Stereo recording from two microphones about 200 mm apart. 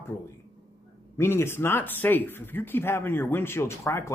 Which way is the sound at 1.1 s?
10° left (ahead or behind).